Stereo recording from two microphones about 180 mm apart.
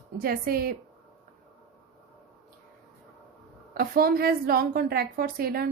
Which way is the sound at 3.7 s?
55° right (ahead or behind).